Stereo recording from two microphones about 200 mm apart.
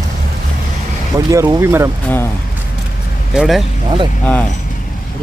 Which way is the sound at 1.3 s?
15° right (ahead or behind).